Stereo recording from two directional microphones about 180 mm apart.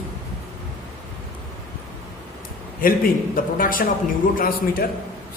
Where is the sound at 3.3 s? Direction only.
50° left (ahead or behind).